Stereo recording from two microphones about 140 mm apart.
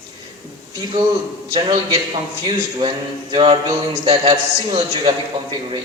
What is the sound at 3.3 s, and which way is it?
A man's voice, 40° right (ahead or behind).